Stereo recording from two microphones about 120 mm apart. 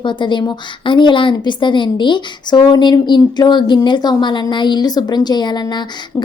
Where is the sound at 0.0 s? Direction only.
40° left (ahead or behind).